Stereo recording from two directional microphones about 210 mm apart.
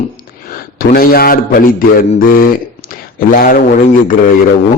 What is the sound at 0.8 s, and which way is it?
A man's voice, 45° left (ahead or behind).